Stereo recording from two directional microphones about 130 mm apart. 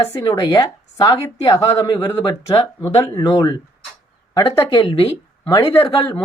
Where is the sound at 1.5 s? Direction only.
25° left (ahead or behind).